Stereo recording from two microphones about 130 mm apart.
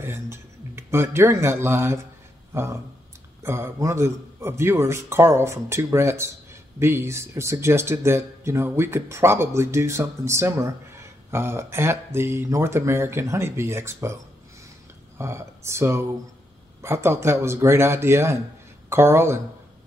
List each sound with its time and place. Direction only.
0.0 s speech: 20° right (ahead or behind)
15.1 s speech: 20° right (ahead or behind)